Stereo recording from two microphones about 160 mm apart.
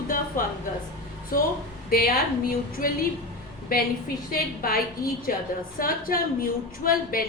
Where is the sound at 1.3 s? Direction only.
60° left (ahead or behind).